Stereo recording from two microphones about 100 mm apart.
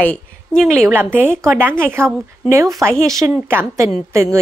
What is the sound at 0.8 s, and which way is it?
A woman's voice, 20° right (ahead or behind).